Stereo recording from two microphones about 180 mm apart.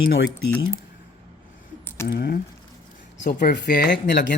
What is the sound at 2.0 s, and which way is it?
Speech, 60° left (ahead or behind).